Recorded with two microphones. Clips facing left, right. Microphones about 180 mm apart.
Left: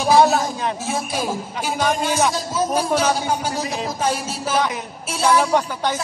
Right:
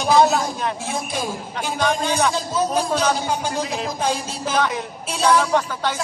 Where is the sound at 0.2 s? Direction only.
15° left (ahead or behind).